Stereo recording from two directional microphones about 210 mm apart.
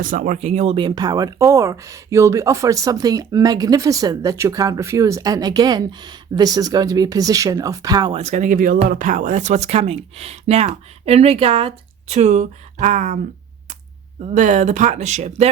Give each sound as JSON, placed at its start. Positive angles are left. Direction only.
{"t": 0.0, "sound": "speech", "side_deg": -40}
{"t": 8.2, "sound": "speech", "side_deg": -35}
{"t": 14.3, "sound": "speech", "side_deg": -35}